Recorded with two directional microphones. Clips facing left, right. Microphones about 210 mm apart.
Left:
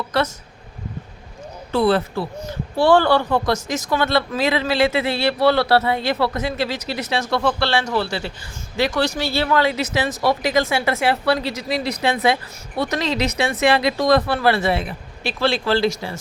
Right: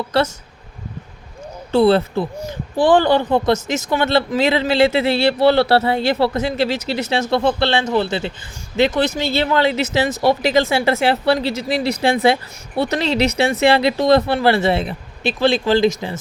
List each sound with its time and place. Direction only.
0.1 s speech: 30° right (ahead or behind)
1.7 s speech: 25° right (ahead or behind)
2.4 s speech: 15° right (ahead or behind)